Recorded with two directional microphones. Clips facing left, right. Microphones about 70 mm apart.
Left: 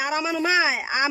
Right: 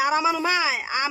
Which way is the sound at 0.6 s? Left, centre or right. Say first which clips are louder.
Left 2 dB; centre.